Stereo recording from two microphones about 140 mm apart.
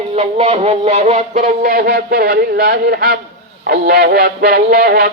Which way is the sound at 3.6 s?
90° right.